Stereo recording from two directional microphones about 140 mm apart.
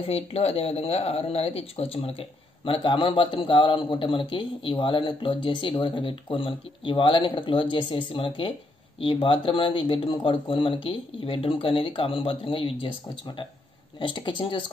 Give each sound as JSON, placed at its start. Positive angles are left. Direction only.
{"t": 0.0, "sound": "speech", "side_deg": 45}